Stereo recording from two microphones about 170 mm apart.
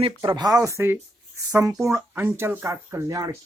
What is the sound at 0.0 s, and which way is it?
Speech, 25° right (ahead or behind).